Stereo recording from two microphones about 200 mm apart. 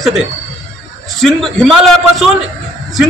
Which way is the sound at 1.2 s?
Centre (ahead or behind).